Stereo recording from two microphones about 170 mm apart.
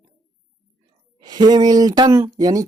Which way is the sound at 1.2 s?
25° right (ahead or behind).